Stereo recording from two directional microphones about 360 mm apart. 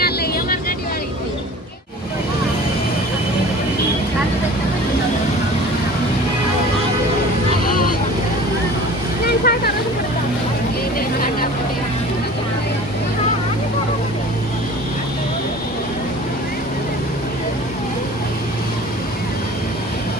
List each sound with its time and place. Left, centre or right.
0.0 s vehicle: left
7.7 s vehicle: left
9.4 s a sound: left